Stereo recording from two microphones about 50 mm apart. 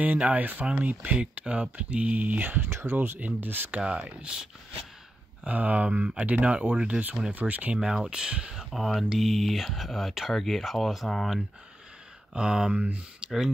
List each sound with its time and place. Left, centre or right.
0.0 s speech: right
2.7 s speech: right
3.2 s speech: right
3.8 s speech: right
5.4 s speech: right
7.7 s speech: centre
8.6 s speech: centre
12.4 s speech: centre
13.2 s a sound: centre